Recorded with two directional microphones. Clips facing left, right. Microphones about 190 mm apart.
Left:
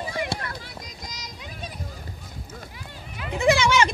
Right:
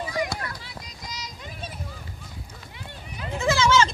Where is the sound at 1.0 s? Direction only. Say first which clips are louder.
Right 2 dB; 45° left (ahead or behind).